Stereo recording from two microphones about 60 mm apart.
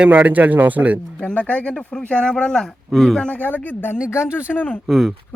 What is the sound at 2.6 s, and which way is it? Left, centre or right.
Speech, centre.